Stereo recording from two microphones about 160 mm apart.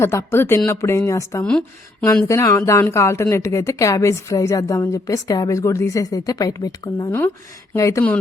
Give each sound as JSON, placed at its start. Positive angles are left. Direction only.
{"t": 0.0, "sound": "a woman's voice", "side_deg": 15}
{"t": 1.5, "sound": "speech", "side_deg": 5}
{"t": 2.2, "sound": "a woman's voice", "side_deg": 20}